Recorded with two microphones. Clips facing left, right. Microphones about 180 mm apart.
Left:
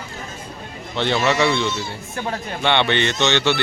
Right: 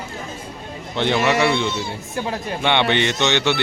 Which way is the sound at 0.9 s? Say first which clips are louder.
Right 1 dB; 15° right (ahead or behind).